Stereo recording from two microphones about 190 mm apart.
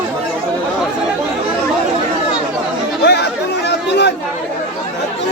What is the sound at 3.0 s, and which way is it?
Chatter, 65° left (ahead or behind).